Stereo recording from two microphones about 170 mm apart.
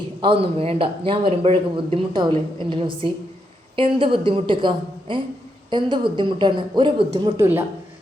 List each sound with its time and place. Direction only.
0.2 s speech: 35° right (ahead or behind)
7.3 s speech: 15° right (ahead or behind)